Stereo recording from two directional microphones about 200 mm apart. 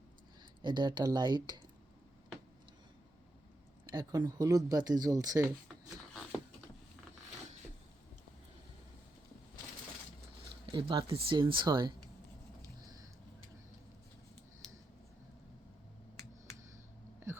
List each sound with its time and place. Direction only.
0.6 s speech: 20° right (ahead or behind)
3.9 s speech: 20° right (ahead or behind)
10.7 s speech: 25° right (ahead or behind)